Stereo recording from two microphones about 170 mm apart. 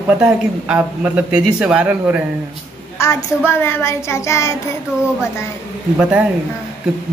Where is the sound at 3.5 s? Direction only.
15° left (ahead or behind).